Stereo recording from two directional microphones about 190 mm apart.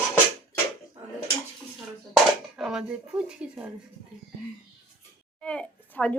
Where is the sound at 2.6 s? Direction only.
Centre (ahead or behind).